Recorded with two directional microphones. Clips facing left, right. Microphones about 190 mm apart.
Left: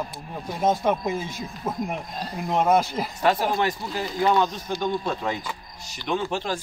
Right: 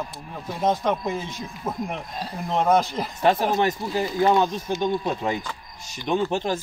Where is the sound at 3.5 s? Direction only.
20° right (ahead or behind).